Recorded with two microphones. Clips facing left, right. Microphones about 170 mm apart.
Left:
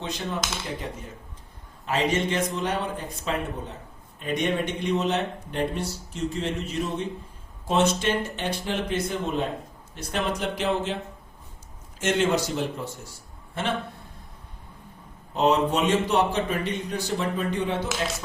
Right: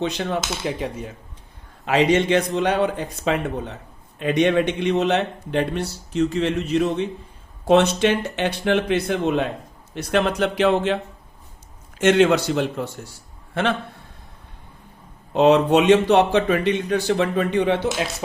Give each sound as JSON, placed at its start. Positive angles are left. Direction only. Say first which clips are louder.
{"t": 0.0, "sound": "speech", "louder": "right 7 dB", "side_deg": -80}
{"t": 1.8, "sound": "a man's voice", "louder": "right 7 dB", "side_deg": -75}
{"t": 15.3, "sound": "a man's voice", "louder": "right 7 dB", "side_deg": -75}